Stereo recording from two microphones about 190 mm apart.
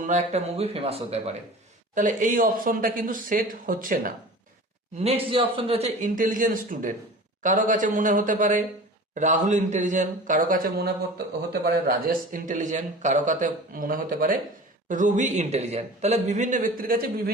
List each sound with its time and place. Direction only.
0.0 s a man's voice: 35° right (ahead or behind)
4.9 s a man's voice: 30° right (ahead or behind); by 17.3 s 50° right (ahead or behind)